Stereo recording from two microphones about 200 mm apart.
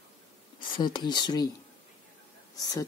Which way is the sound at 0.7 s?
25° left (ahead or behind).